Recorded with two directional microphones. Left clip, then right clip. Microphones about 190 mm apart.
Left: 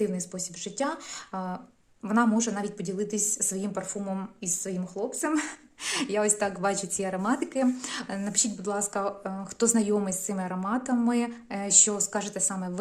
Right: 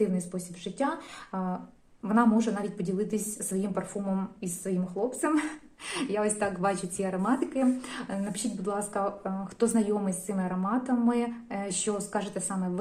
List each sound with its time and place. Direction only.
0.0 s speech: 25° left (ahead or behind)